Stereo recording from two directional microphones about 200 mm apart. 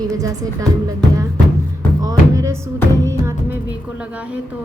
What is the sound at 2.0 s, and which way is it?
Music, 15° right (ahead or behind).